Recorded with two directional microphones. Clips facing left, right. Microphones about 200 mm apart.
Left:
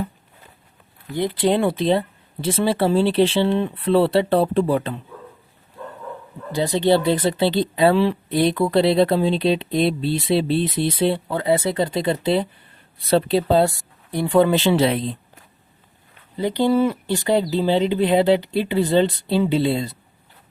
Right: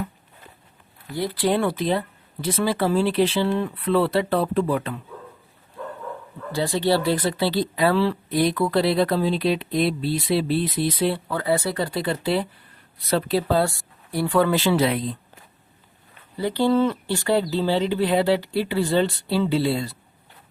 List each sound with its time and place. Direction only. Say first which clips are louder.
1.1 s speech: left 3 dB; 20° left (ahead or behind)
6.5 s speech: left 4 dB; 20° left (ahead or behind)
16.4 s speech: left 2 dB; 15° left (ahead or behind)